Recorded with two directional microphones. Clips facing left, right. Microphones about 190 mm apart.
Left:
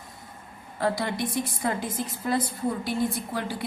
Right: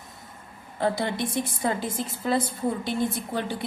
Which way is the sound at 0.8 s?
25° right (ahead or behind).